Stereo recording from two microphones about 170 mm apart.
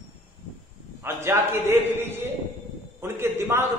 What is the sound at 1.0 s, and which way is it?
A man's voice, 15° right (ahead or behind).